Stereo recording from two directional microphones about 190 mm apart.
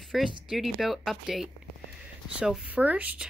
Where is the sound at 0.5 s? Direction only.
Centre (ahead or behind).